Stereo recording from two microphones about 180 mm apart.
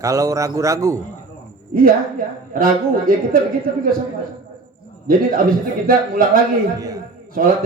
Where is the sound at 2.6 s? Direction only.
50° right (ahead or behind).